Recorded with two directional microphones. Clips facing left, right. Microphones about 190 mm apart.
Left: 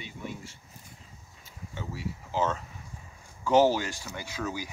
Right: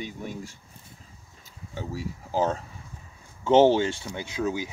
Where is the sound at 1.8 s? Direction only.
40° right (ahead or behind).